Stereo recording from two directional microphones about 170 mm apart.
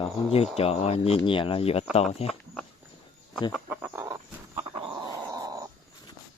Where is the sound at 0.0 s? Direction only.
35° left (ahead or behind).